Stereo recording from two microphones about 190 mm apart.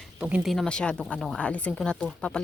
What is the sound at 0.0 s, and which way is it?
A woman's voice, 5° right (ahead or behind).